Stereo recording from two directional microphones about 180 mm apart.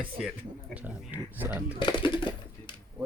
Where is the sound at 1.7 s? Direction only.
25° left (ahead or behind).